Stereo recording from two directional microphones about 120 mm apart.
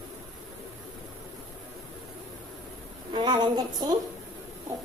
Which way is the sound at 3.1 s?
40° right (ahead or behind).